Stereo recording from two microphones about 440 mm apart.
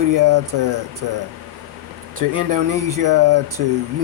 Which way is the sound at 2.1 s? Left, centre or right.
Right.